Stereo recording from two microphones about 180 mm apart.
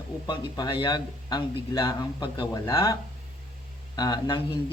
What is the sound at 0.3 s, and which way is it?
Speech, 25° left (ahead or behind).